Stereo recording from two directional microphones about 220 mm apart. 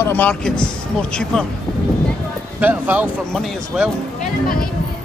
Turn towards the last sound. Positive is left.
turn(degrees=-5)  # may be behind; listen again after turning